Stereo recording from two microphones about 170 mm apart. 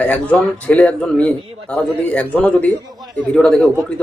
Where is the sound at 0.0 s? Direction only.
10° left (ahead or behind).